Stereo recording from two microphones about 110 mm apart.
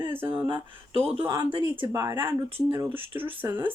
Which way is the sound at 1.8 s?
25° right (ahead or behind).